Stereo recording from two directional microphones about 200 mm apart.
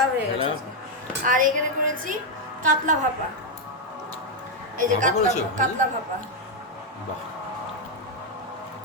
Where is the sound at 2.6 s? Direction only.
40° right (ahead or behind).